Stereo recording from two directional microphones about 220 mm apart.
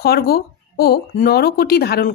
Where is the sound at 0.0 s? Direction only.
45° left (ahead or behind).